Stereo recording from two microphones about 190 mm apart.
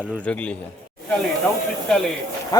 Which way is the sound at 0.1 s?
5° left (ahead or behind).